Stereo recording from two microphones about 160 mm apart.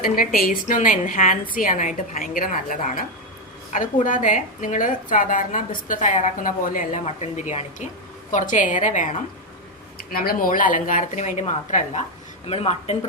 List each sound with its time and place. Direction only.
0.0 s a woman's voice: 65° left (ahead or behind)
4.0 s a woman's voice: 55° left (ahead or behind)
10.1 s a woman's voice: 65° left (ahead or behind); by 13.1 s 40° left (ahead or behind)